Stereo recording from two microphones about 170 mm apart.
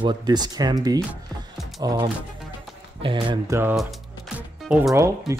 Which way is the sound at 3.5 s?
15° right (ahead or behind).